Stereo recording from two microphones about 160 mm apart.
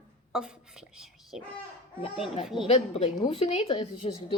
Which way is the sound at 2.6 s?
40° left (ahead or behind).